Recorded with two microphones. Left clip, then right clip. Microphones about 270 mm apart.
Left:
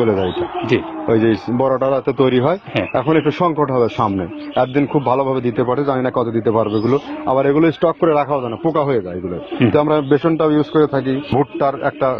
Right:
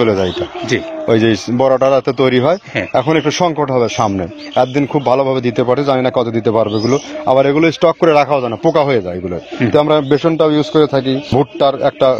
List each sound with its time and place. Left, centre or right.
1.0 s a man's voice: right